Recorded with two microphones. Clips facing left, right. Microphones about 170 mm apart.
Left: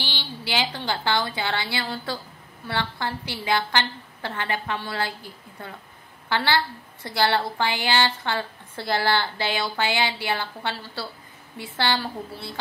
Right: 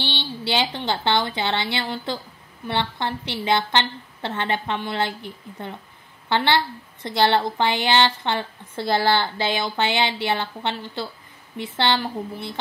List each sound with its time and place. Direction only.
0.0 s a woman's voice: 25° right (ahead or behind)